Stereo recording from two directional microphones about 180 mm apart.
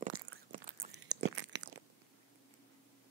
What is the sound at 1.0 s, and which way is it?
Biting, 80° right.